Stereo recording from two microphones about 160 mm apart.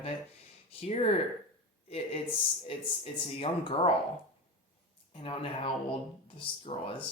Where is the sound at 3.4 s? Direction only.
35° left (ahead or behind).